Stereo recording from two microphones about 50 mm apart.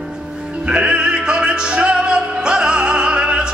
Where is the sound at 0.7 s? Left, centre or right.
Right.